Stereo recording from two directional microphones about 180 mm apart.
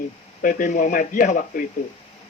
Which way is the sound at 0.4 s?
45° left (ahead or behind).